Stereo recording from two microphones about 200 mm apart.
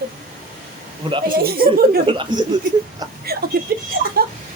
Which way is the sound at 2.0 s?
25° right (ahead or behind).